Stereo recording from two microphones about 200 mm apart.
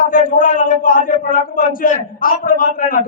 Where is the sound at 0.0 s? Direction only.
45° left (ahead or behind).